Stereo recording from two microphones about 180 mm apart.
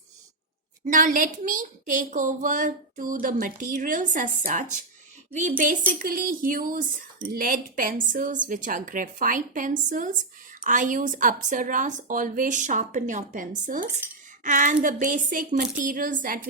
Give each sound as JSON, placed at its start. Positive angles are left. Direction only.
{"t": 0.9, "sound": "a woman's voice", "side_deg": -45}